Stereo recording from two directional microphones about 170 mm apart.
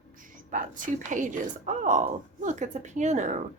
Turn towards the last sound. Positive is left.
turn(degrees=-45)  # may be behind; listen again after turning